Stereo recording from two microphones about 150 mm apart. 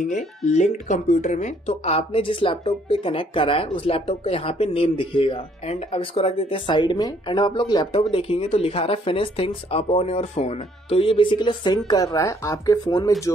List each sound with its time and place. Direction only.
0.0 s speech: 50° left (ahead or behind); by 12.7 s 20° left (ahead or behind)